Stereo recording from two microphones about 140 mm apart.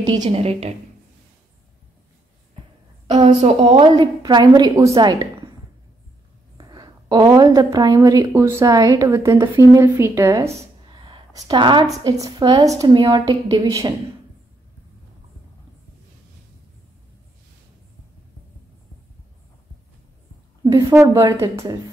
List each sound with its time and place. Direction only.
0.0 s a woman's voice: 30° right (ahead or behind)
0.3 s a woman's voice: 45° right (ahead or behind)
3.2 s a woman's voice: 40° right (ahead or behind)
3.8 s a woman's voice: 30° right (ahead or behind)
6.6 s a woman's voice: 30° right (ahead or behind)
10.9 s a sound: 35° right (ahead or behind)
12.0 s a woman's voice: 30° right (ahead or behind)
20.9 s a woman's voice: 20° right (ahead or behind)